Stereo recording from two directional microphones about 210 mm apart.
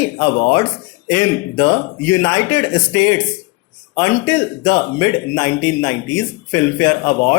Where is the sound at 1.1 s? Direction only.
15° left (ahead or behind).